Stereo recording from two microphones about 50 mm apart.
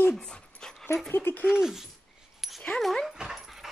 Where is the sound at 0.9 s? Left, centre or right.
Left.